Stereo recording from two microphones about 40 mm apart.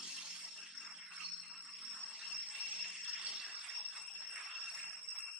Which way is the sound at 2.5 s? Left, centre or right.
Right.